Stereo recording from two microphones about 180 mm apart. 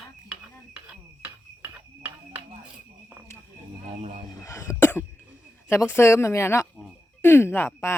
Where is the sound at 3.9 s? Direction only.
35° right (ahead or behind).